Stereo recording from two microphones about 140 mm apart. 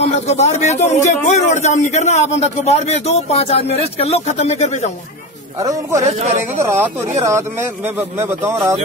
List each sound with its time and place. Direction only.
0.0 s a man's voice: 50° left (ahead or behind)
5.6 s speech: 25° right (ahead or behind)
6.0 s speech: 50° right (ahead or behind)
6.6 s speech: 20° right (ahead or behind)